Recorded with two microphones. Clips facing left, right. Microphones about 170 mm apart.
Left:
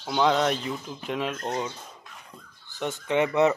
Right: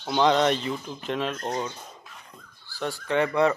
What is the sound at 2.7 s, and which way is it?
Speech, 20° left (ahead or behind).